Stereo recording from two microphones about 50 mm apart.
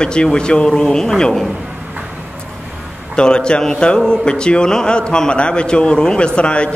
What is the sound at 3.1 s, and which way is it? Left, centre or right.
A man's voice, centre.